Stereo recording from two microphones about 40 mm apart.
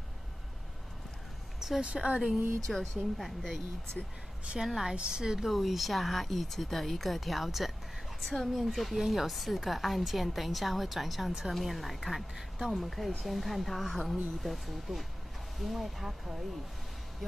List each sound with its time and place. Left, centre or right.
1.6 s a sound: centre
2.0 s speech: centre
2.7 s a woman's voice: centre
4.6 s a woman's voice: centre
5.5 s a woman's voice: centre